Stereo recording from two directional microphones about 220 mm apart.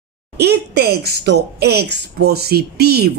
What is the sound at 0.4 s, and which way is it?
A woman's voice, 50° right (ahead or behind).